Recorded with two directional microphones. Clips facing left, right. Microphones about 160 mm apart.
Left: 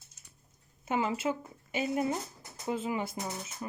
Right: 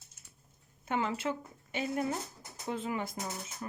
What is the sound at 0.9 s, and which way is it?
Speech, 10° left (ahead or behind).